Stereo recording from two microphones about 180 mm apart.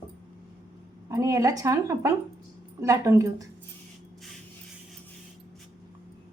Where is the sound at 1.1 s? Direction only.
20° right (ahead or behind).